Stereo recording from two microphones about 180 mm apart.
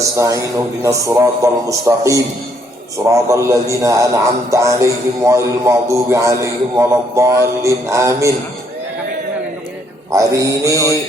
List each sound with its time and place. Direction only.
0.2 s speech: 20° right (ahead or behind)
10.1 s mantra: 20° right (ahead or behind)
10.8 s a sound: 20° left (ahead or behind)